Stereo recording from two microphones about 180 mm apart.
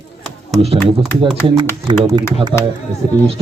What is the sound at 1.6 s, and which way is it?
Speech, 25° right (ahead or behind).